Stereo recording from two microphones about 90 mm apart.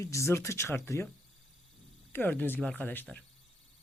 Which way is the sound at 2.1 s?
20° left (ahead or behind).